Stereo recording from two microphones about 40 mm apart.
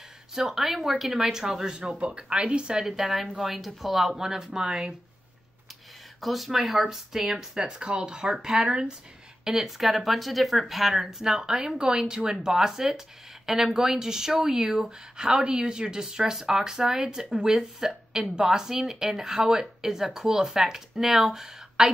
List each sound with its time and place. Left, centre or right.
0.3 s speech: centre
1.2 s speech: centre
2.8 s speech: centre
4.6 s speech: centre
6.2 s speech: centre